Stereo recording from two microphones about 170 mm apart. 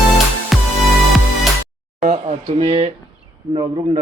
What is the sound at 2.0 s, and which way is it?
Speech, 45° right (ahead or behind).